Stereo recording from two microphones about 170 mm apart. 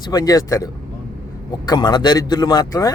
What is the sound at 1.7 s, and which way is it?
Speech, 25° left (ahead or behind).